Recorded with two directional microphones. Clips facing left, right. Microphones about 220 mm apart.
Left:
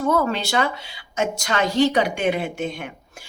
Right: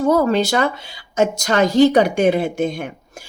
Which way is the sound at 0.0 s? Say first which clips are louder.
Right 6 dB; 35° right (ahead or behind).